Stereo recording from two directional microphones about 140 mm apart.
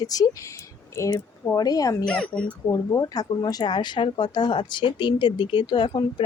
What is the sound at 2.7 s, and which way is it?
A woman's voice, 25° left (ahead or behind).